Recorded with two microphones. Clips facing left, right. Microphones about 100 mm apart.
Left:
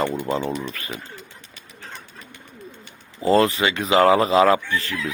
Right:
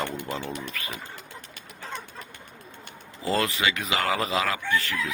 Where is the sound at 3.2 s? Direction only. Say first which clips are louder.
Left 8 dB; 35° left (ahead or behind).